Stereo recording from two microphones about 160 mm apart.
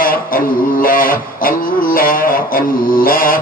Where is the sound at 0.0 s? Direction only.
65° left (ahead or behind).